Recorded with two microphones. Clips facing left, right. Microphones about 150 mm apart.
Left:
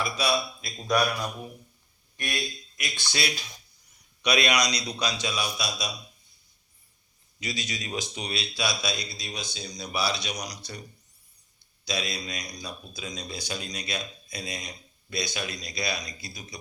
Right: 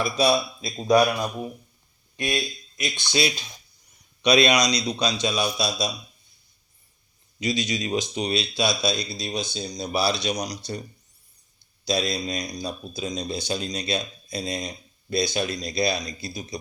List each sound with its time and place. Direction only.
0.0 s speech: 25° right (ahead or behind)
7.3 s speech: 20° right (ahead or behind)
11.9 s speech: 35° right (ahead or behind)